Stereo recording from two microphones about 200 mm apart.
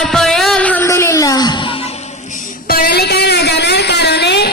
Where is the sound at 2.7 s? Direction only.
50° left (ahead or behind).